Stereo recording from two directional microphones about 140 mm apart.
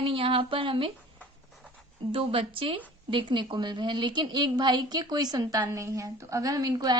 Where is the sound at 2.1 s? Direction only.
40° right (ahead or behind).